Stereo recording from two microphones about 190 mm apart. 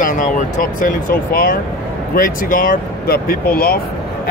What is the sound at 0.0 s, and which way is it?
Speech, 45° left (ahead or behind).